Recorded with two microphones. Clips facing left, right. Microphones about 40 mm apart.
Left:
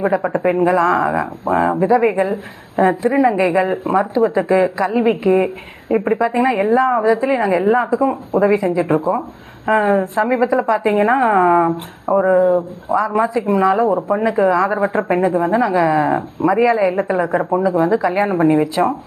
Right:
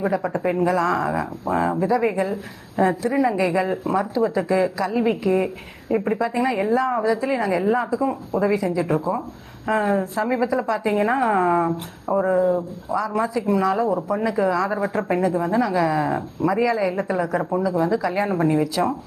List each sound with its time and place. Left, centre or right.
0.0 s speech: left